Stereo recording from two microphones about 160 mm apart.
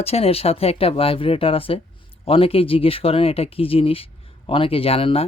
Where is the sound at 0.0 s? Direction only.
40° left (ahead or behind).